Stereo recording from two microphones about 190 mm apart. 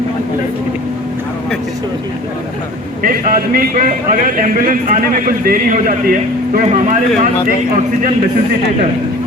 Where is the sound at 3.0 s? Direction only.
50° right (ahead or behind).